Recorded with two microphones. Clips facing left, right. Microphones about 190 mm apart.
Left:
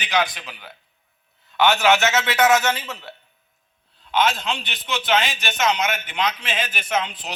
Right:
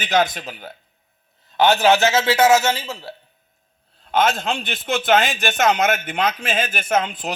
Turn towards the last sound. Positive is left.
turn(degrees=-50)  # may be behind; listen again after turning